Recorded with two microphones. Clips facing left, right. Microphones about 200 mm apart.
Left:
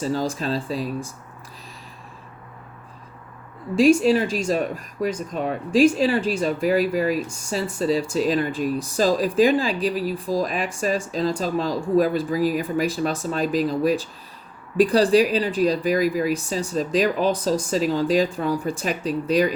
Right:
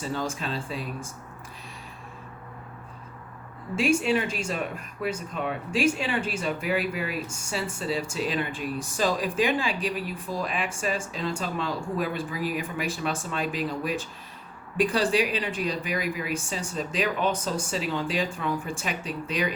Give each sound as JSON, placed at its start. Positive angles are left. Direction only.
{"t": 0.0, "sound": "speech", "side_deg": 35}
{"t": 3.8, "sound": "speech", "side_deg": 35}